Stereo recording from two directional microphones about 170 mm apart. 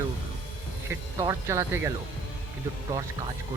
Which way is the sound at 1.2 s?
15° right (ahead or behind).